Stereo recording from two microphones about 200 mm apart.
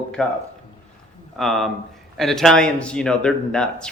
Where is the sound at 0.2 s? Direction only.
Centre (ahead or behind).